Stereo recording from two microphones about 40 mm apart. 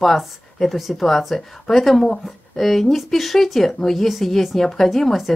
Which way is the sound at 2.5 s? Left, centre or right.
Centre.